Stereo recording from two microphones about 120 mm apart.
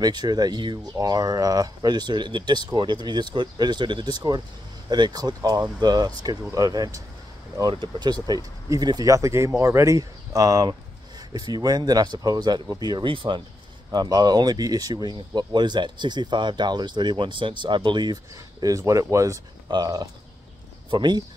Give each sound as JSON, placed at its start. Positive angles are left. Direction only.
{"t": 0.0, "sound": "speech", "side_deg": -35}
{"t": 13.9, "sound": "speech", "side_deg": -35}